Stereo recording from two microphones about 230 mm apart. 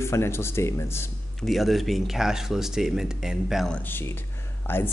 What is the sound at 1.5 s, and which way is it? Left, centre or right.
Speech, centre.